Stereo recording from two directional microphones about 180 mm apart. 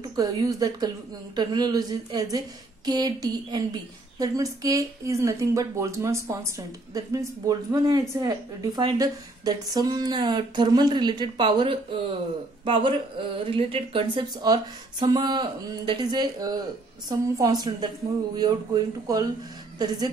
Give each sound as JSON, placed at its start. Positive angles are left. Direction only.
{"t": 0.1, "sound": "a woman's voice", "side_deg": -20}